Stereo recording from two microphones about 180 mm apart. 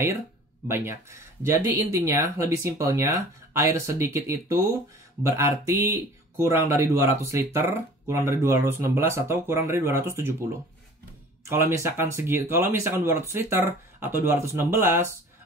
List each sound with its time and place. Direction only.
0.7 s speech: 15° right (ahead or behind)
11.4 s speech: 15° right (ahead or behind)